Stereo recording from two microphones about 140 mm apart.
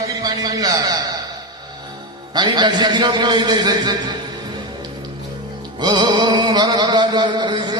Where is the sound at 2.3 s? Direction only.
30° right (ahead or behind).